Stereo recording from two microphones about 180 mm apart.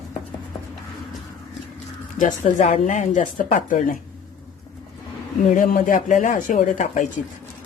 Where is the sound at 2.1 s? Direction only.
45° left (ahead or behind).